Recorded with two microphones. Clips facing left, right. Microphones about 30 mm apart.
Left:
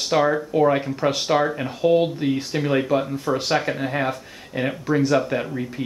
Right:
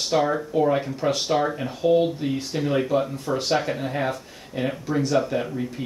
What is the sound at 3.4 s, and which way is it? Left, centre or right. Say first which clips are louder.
Speech: left 1 dB; centre.